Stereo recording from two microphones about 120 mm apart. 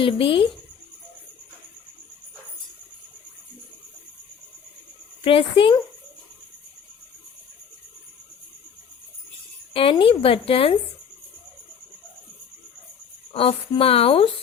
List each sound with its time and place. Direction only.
0.0 s speech: 45° left (ahead or behind)
5.2 s speech: 50° left (ahead or behind)
9.9 s speech: 45° left (ahead or behind)
13.3 s speech: 50° left (ahead or behind)